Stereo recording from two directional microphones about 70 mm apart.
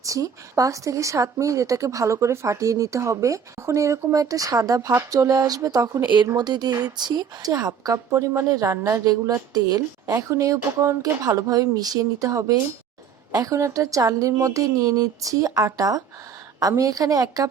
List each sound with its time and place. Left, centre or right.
0.0 s speech: right
6.3 s speech: right
9.5 s speech: right
10.2 s speech: right